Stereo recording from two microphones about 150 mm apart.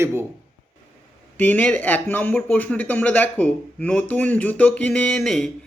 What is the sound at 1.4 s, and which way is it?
Speech, 10° left (ahead or behind).